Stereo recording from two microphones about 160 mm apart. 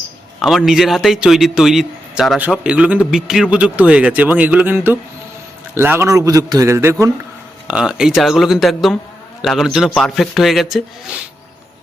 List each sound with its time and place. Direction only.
0.4 s a man's voice: centre (ahead or behind); by 6.9 s 15° right (ahead or behind)
7.7 s a man's voice: 5° right (ahead or behind)